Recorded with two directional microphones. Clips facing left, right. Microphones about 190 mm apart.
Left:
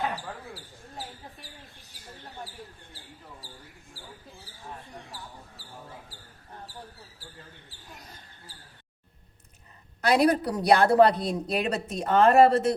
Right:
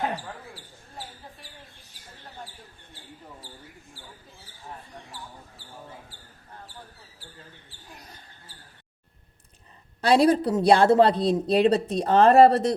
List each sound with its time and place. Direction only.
10.0 s a woman's voice: 30° right (ahead or behind)